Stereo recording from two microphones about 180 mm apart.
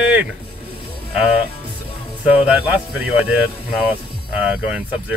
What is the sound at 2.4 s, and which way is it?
Speech, 5° right (ahead or behind).